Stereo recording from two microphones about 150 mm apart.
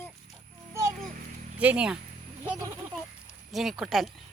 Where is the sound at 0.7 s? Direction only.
20° right (ahead or behind).